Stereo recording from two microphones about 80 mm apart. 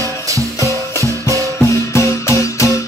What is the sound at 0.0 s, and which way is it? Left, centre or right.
Music, right.